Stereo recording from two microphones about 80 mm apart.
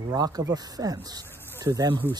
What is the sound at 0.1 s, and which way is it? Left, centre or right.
Speech, right.